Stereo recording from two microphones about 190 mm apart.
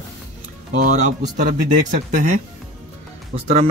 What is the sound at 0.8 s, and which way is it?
Speech, 40° right (ahead or behind).